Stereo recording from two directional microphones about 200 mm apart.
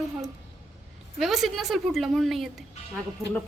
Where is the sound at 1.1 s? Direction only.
Centre (ahead or behind).